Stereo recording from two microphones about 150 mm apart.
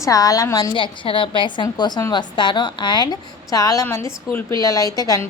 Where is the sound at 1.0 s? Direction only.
35° left (ahead or behind).